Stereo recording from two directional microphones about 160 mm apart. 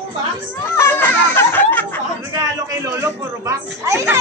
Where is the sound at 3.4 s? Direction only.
20° right (ahead or behind).